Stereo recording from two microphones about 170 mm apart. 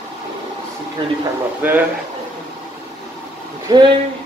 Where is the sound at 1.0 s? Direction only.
30° right (ahead or behind).